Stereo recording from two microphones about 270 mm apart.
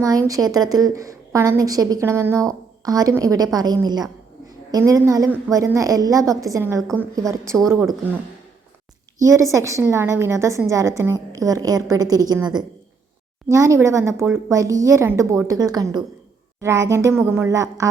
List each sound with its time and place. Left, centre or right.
0.0 s a woman's voice: centre
9.2 s a woman's voice: centre